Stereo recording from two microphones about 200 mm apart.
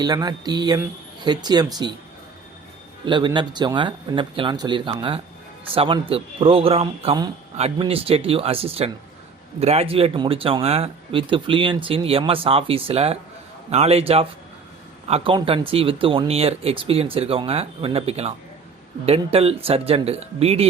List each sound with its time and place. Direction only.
0.0 s speech: 20° right (ahead or behind)
3.1 s speech: 25° right (ahead or behind)